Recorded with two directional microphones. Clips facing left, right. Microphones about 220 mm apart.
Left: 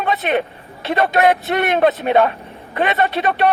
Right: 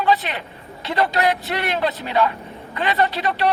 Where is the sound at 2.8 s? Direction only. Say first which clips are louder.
Left 3 dB; 25° left (ahead or behind).